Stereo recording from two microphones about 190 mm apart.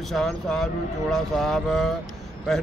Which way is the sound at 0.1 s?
Centre (ahead or behind).